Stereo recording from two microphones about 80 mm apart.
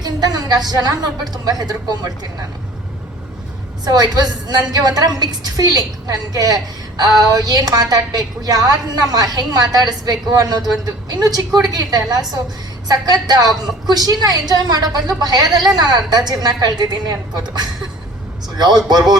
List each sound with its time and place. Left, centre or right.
0.0 s a woman's voice: right
3.8 s a woman's voice: right
18.5 s a man's voice: right